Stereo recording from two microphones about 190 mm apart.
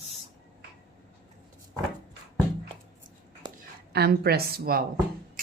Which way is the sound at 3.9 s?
55° right (ahead or behind).